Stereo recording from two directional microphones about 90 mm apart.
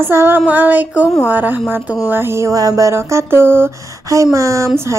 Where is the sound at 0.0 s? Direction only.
25° right (ahead or behind).